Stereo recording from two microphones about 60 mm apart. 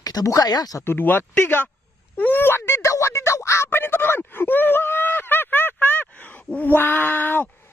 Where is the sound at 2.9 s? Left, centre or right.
Left.